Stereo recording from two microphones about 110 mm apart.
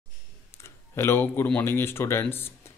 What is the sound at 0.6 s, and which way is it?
Speech, 25° left (ahead or behind).